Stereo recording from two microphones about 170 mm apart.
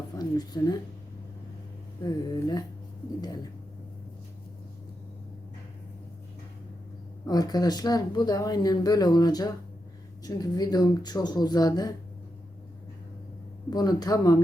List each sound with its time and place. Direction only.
0.2 s speech: 20° left (ahead or behind)
2.0 s speech: 25° left (ahead or behind)
7.3 s speech: 20° left (ahead or behind)
13.7 s speech: 20° left (ahead or behind)